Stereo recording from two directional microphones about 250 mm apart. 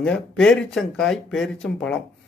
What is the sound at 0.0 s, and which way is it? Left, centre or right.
Speech, centre.